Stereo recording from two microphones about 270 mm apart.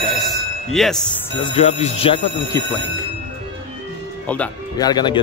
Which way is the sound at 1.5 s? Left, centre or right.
Left.